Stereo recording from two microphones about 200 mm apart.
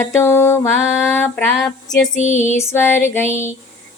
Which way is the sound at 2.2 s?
40° left (ahead or behind).